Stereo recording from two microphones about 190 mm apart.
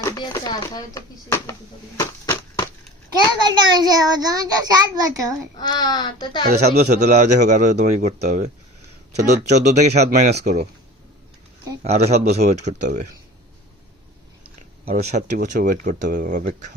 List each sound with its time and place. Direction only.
0.0 s speech: 20° left (ahead or behind)
2.0 s a sound: 15° left (ahead or behind)
3.1 s a child's voice: 25° right (ahead or behind)
5.5 s a child's voice: 20° left (ahead or behind)
7.0 s speech: 40° right (ahead or behind)
9.5 s speech: 35° right (ahead or behind)
11.8 s speech: 35° right (ahead or behind)
14.8 s speech: 35° right (ahead or behind)